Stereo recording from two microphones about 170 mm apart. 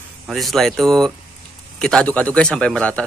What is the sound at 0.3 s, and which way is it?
A man's voice, centre (ahead or behind).